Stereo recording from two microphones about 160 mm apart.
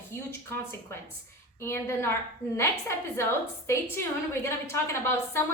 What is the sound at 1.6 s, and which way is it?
A woman's voice, 15° left (ahead or behind).